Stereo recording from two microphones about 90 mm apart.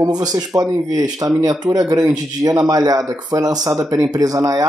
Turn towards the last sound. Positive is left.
turn(degrees=-40)  # may be behind; listen again after turning